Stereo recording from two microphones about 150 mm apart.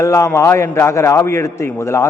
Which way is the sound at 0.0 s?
20° left (ahead or behind).